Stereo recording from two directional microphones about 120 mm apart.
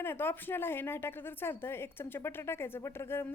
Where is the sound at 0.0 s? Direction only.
20° left (ahead or behind).